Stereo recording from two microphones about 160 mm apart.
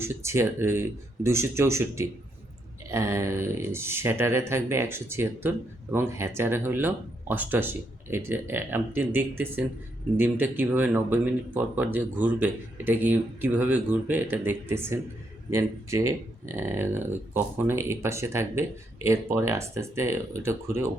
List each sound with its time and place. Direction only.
0.0 s speech: 15° right (ahead or behind)